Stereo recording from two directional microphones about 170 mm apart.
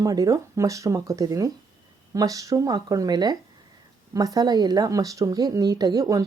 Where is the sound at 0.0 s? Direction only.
20° right (ahead or behind).